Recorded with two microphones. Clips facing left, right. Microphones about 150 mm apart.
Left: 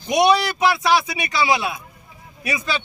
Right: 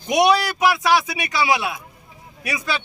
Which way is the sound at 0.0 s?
15° right (ahead or behind).